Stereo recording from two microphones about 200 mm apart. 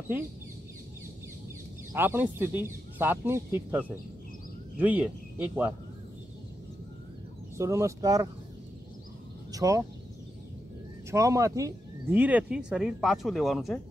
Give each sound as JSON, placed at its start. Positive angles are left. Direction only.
{"t": 1.9, "sound": "speech", "side_deg": -10}
{"t": 7.5, "sound": "speech", "side_deg": -15}
{"t": 9.5, "sound": "speech", "side_deg": -15}
{"t": 11.1, "sound": "speech", "side_deg": -15}